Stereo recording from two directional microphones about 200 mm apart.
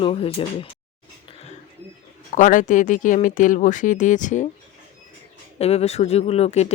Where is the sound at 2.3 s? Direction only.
40° left (ahead or behind).